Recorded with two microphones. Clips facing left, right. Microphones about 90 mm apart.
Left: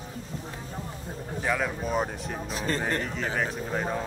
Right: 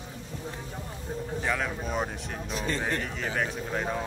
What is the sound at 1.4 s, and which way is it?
Speech, 5° left (ahead or behind).